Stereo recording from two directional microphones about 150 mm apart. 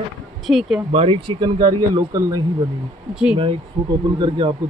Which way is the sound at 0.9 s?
40° right (ahead or behind).